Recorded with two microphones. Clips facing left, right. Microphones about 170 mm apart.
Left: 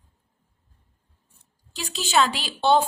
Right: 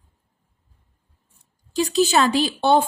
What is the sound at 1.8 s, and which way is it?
Speech, 40° right (ahead or behind).